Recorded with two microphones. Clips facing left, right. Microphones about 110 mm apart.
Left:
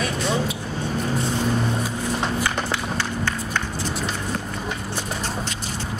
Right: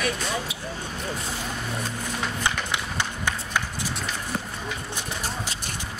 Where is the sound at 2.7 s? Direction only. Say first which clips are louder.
Left 4 dB; 15° right (ahead or behind).